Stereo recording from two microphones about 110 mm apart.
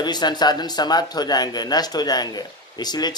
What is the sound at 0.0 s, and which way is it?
A man's voice, 40° left (ahead or behind).